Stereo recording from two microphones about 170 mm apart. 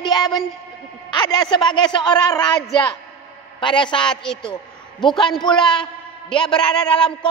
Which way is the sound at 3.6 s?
30° left (ahead or behind).